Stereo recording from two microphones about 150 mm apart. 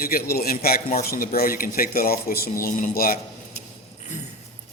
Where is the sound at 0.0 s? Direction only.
90° left.